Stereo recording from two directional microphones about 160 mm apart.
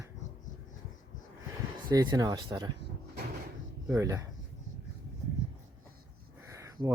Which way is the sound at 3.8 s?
20° right (ahead or behind).